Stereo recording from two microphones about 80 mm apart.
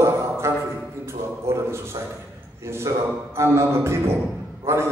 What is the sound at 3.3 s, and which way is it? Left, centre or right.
A man's voice, right.